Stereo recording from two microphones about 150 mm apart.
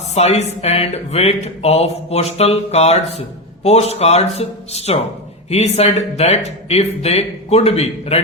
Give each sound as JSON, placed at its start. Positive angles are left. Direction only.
{"t": 0.1, "sound": "speech", "side_deg": 45}